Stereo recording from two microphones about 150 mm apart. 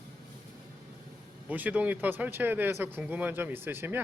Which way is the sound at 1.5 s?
10° right (ahead or behind).